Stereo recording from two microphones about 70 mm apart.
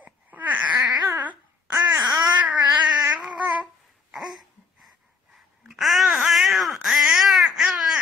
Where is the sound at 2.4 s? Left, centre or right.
Right.